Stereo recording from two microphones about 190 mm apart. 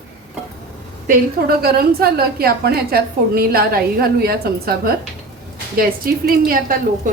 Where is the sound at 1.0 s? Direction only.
55° right (ahead or behind).